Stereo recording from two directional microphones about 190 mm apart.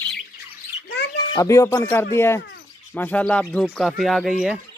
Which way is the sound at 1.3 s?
15° left (ahead or behind).